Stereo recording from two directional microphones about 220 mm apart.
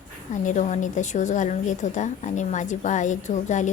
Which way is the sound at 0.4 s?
35° left (ahead or behind).